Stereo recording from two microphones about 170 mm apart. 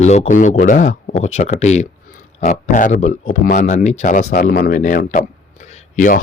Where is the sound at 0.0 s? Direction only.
40° left (ahead or behind).